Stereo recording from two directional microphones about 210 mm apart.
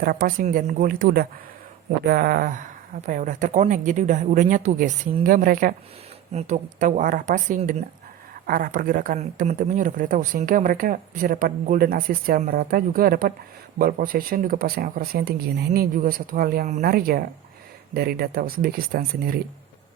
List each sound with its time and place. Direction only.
0.0 s speech: 45° right (ahead or behind)